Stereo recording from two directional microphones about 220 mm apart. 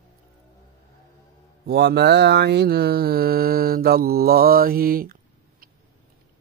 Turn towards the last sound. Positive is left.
turn(degrees=-40)  # may be behind; listen again after turning